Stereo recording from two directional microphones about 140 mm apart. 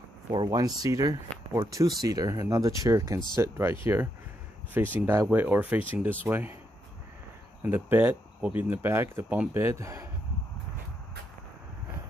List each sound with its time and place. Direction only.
0.5 s speech: 25° right (ahead or behind)
7.6 s speech: 15° right (ahead or behind)